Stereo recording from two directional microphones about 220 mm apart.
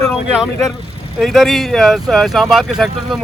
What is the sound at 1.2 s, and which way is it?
Speech, centre (ahead or behind).